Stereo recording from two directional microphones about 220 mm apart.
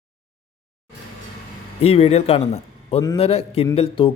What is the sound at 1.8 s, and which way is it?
A man's voice, 25° left (ahead or behind).